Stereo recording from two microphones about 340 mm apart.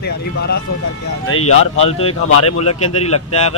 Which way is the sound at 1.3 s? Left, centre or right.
Left.